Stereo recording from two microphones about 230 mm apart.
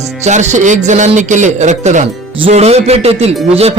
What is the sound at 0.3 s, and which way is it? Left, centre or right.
Speech, right.